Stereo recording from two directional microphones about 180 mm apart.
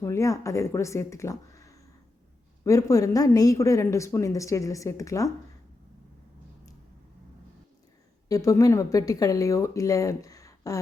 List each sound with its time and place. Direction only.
0.0 s speech: 15° left (ahead or behind)
8.3 s speech: 20° left (ahead or behind)